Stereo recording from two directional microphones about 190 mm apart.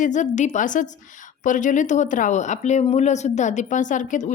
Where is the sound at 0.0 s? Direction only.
40° left (ahead or behind).